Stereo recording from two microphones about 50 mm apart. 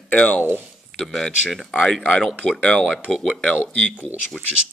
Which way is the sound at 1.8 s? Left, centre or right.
Centre.